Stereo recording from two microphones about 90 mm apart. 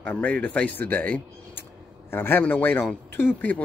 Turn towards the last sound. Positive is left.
turn(degrees=20)  # may be behind; listen again after turning